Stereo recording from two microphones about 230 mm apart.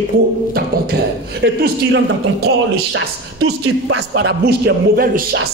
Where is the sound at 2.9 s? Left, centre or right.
Right.